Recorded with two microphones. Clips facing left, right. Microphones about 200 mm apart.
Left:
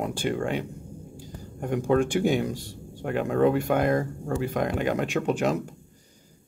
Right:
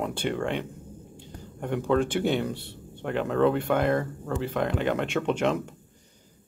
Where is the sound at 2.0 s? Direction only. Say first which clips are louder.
Left 2 dB; 10° left (ahead or behind).